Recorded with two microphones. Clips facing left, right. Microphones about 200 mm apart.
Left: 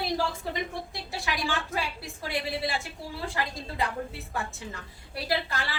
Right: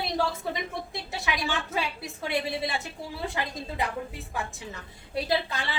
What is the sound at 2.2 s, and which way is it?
A woman's voice, 20° right (ahead or behind).